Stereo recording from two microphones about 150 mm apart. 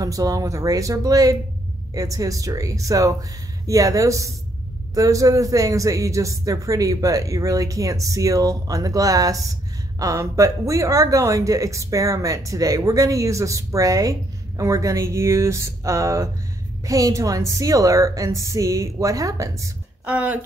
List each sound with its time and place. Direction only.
0.0 s speech: 25° right (ahead or behind)
20.1 s speech: 10° right (ahead or behind)